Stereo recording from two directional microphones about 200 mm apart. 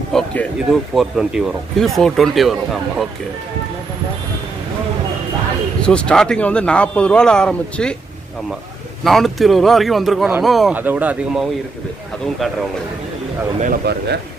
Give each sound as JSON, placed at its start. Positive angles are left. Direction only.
{"t": 0.1, "sound": "a sound", "side_deg": 5}
{"t": 0.9, "sound": "speech", "side_deg": 0}
{"t": 5.8, "sound": "speech", "side_deg": 5}
{"t": 9.0, "sound": "speech", "side_deg": 0}
{"t": 13.6, "sound": "speech", "side_deg": -50}